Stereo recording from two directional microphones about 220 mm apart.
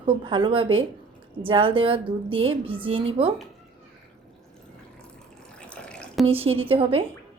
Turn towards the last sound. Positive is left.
turn(degrees=-25)  # may be behind; listen again after turning